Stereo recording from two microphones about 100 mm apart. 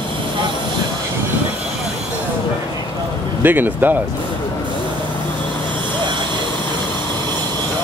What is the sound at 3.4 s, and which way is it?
Speech, 20° right (ahead or behind).